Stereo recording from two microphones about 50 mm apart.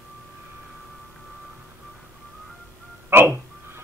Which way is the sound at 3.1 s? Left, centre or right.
Right.